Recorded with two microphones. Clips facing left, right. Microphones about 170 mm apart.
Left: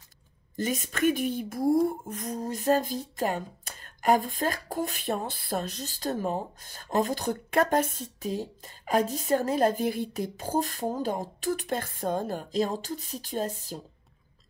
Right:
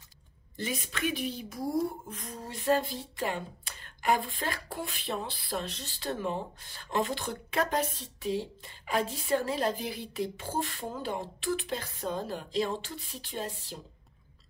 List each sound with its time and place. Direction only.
0.6 s speech: 45° left (ahead or behind)